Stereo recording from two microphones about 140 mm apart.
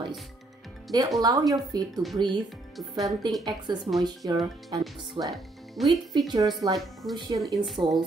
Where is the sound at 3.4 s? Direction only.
30° right (ahead or behind).